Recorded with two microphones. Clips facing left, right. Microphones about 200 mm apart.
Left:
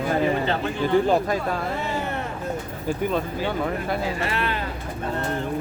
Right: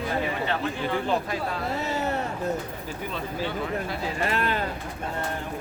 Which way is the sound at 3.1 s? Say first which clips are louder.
Left 5 dB; 50° left (ahead or behind).